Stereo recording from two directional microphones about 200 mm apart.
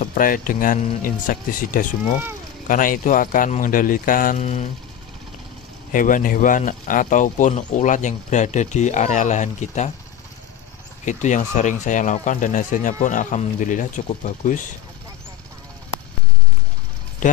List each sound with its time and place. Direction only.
0.0 s speech: 45° left (ahead or behind)
5.9 s speech: 40° left (ahead or behind)
11.1 s speech: 35° left (ahead or behind)